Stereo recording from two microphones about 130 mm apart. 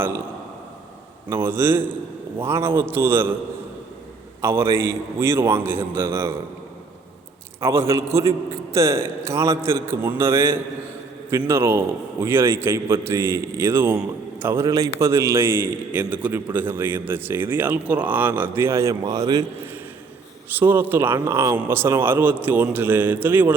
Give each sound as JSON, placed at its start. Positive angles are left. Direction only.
{"t": 1.3, "sound": "a man's voice", "side_deg": -20}
{"t": 4.4, "sound": "a man's voice", "side_deg": -20}
{"t": 7.6, "sound": "a man's voice", "side_deg": -20}
{"t": 20.6, "sound": "a man's voice", "side_deg": -15}